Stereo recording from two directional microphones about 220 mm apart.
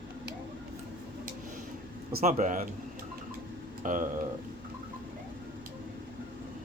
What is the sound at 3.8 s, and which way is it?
Speech, 35° right (ahead or behind).